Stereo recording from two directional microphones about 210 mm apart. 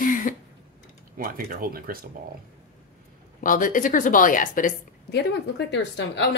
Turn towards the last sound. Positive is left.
turn(degrees=60)  # may be behind; listen again after turning